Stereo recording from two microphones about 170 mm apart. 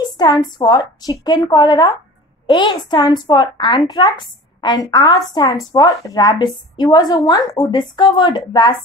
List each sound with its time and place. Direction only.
0.2 s a woman's voice: 25° left (ahead or behind)